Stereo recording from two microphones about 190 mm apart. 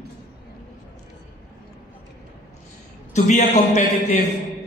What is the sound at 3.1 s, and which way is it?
A man's voice, 40° left (ahead or behind).